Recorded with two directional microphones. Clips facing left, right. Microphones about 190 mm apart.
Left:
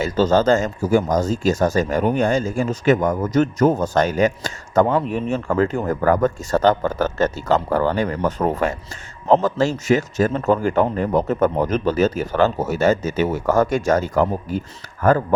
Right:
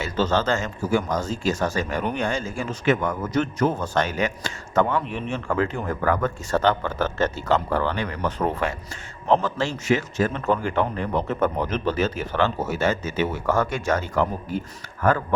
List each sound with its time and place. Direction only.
0.0 s speech: 40° left (ahead or behind)